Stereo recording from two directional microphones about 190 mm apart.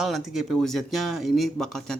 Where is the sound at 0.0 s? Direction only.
Centre (ahead or behind).